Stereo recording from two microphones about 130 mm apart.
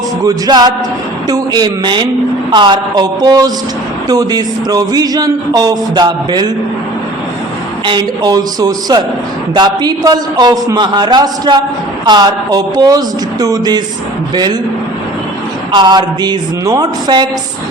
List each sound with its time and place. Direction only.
0.3 s a man's voice: 30° right (ahead or behind)
7.9 s a man's voice: 35° right (ahead or behind)
15.7 s a man's voice: 35° right (ahead or behind)